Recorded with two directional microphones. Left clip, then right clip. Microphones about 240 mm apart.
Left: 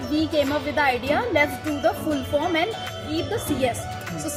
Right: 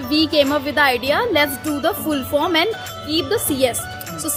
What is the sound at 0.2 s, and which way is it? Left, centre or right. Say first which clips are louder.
Music: right 6 dB; right.